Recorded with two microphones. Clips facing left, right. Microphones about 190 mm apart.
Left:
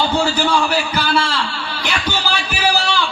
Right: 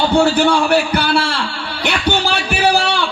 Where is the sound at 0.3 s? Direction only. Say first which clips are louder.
Right 4 dB; 65° right (ahead or behind).